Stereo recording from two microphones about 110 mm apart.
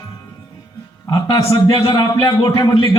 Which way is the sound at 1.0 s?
35° left (ahead or behind).